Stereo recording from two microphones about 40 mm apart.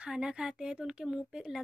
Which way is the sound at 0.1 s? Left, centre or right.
Centre.